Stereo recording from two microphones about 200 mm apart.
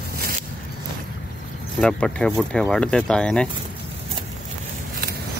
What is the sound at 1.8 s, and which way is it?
Speech, 5° left (ahead or behind).